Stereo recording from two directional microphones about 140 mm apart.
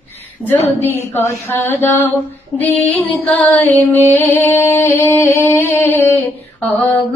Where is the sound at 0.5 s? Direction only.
15° left (ahead or behind).